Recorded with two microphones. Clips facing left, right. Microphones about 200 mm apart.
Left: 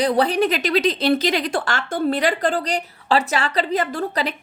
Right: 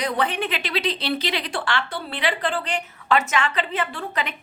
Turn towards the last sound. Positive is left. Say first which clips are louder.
# left 6 dB
turn(degrees=35)  # may be behind; listen again after turning